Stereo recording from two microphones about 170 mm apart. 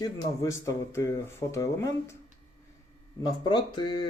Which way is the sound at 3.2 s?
25° left (ahead or behind).